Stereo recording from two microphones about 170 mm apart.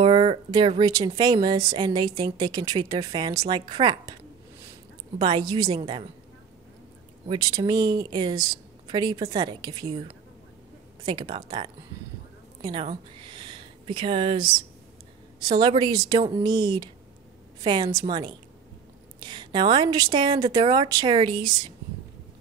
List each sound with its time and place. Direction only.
0.0 s speech: 30° right (ahead or behind)
5.2 s speech: 25° right (ahead or behind)
7.2 s speech: 25° right (ahead or behind)